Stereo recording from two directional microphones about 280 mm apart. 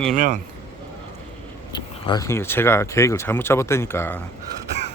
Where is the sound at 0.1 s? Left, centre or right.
Right.